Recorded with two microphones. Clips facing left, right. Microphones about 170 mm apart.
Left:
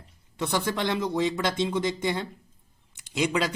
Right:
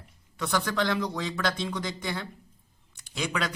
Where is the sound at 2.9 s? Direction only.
20° left (ahead or behind).